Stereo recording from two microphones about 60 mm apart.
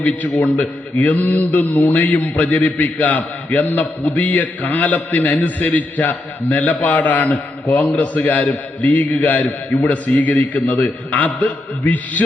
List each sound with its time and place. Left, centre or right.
0.0 s a man's voice: left